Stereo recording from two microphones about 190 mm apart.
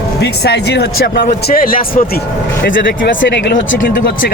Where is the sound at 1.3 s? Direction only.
45° left (ahead or behind).